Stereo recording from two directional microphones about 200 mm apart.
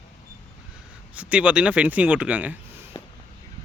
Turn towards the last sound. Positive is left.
turn(degrees=25)  # may be behind; listen again after turning